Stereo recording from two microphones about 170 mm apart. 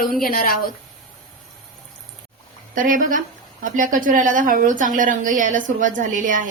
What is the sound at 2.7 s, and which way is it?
A woman's voice, 50° right (ahead or behind).